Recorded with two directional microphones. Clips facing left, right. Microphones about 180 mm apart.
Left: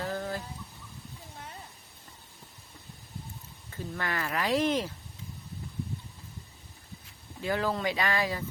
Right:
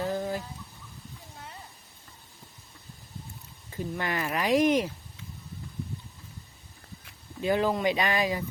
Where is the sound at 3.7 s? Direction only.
15° right (ahead or behind).